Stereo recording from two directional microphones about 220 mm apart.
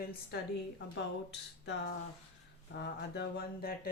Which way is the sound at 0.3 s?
45° left (ahead or behind).